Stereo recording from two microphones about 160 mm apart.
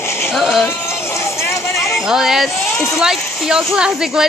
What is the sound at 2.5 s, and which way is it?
Speech, 15° left (ahead or behind).